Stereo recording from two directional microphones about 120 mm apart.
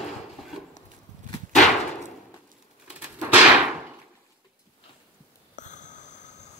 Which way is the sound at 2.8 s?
10° right (ahead or behind).